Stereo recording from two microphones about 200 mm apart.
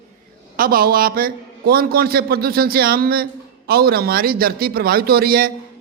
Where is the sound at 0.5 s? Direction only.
45° right (ahead or behind).